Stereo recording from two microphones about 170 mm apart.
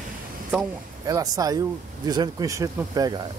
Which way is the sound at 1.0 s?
20° right (ahead or behind).